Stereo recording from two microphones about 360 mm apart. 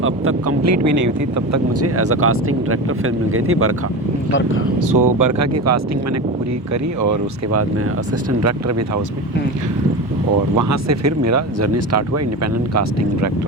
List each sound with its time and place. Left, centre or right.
0.0 s speech: right
1.5 s speech: right
4.3 s speech: left
4.9 s speech: right
7.0 s speech: right
10.6 s speech: right